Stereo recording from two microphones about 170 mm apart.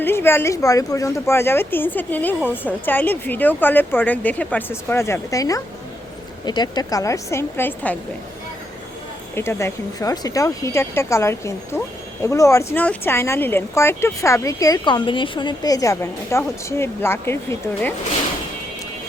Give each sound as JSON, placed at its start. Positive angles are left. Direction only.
{"t": 0.0, "sound": "speech", "side_deg": 15}
{"t": 9.3, "sound": "speech", "side_deg": 15}